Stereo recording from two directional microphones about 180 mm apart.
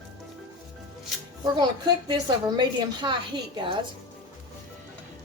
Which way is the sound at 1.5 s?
25° right (ahead or behind).